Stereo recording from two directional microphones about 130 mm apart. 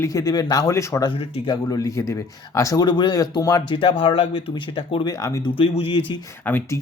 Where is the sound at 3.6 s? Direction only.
40° left (ahead or behind).